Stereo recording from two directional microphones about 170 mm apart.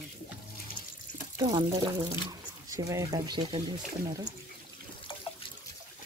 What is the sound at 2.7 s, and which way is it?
Speech, 20° right (ahead or behind).